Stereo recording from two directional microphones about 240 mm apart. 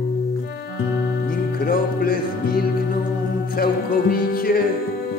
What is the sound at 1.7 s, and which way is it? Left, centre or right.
Music, left.